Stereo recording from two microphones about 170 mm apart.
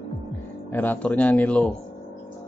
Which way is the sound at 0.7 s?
10° left (ahead or behind).